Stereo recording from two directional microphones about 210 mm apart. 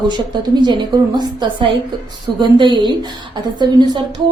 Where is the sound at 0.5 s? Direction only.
20° right (ahead or behind).